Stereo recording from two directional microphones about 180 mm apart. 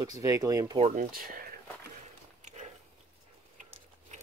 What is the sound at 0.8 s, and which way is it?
Speech, 35° right (ahead or behind).